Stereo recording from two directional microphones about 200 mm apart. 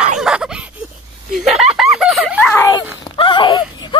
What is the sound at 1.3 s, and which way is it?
Snicker, centre (ahead or behind).